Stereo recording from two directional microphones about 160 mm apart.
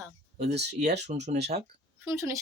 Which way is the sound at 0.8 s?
45° right (ahead or behind).